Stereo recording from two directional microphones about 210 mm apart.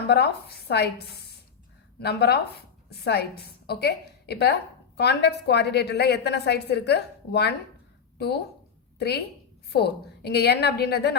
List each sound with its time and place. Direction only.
0.1 s a woman's voice: 50° left (ahead or behind)